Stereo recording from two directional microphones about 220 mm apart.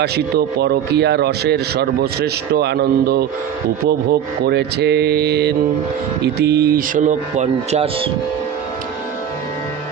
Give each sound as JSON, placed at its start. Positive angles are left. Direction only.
{"t": 0.0, "sound": "speech", "side_deg": -45}